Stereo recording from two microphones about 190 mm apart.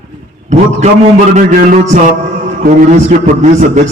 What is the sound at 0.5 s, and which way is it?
A man's voice, 40° right (ahead or behind).